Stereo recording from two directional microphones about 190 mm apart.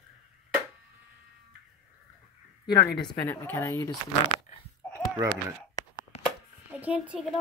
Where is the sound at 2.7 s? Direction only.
20° left (ahead or behind).